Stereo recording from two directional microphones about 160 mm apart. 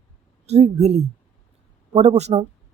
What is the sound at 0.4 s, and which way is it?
Speech, 40° right (ahead or behind).